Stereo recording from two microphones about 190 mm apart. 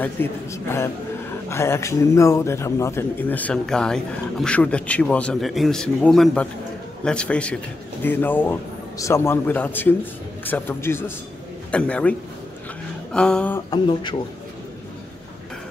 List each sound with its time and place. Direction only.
0.0 s a man's voice: 10° left (ahead or behind)
13.7 s speech: 25° left (ahead or behind)